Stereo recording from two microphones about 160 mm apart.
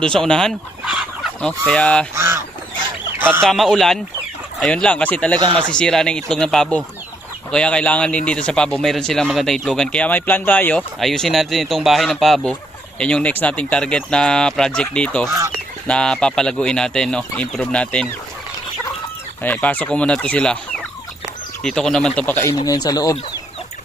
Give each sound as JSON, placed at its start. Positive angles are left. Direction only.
{"t": 0.0, "sound": "fowl", "side_deg": 5}
{"t": 2.1, "sound": "goose", "side_deg": -15}
{"t": 3.2, "sound": "a sound", "side_deg": -15}
{"t": 3.4, "sound": "speech", "side_deg": 0}
{"t": 19.4, "sound": "speech", "side_deg": 10}
{"t": 22.5, "sound": "speech", "side_deg": 25}